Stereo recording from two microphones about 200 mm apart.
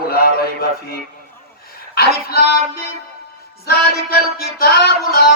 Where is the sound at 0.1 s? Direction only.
50° left (ahead or behind).